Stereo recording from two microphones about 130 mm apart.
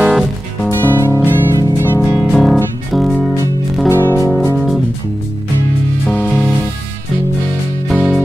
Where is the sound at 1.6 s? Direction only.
20° left (ahead or behind).